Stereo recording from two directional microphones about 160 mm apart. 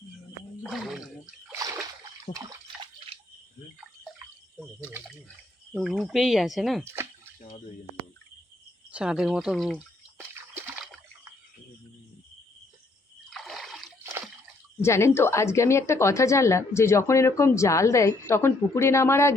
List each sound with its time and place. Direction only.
0.6 s speech: centre (ahead or behind)
2.3 s water: 20° right (ahead or behind)
5.7 s speech: centre (ahead or behind)
8.9 s speech: 5° right (ahead or behind)
13.3 s splash: centre (ahead or behind)
14.8 s speech: 15° left (ahead or behind)